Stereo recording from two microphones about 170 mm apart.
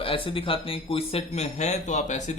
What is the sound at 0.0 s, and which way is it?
Speech, 30° left (ahead or behind).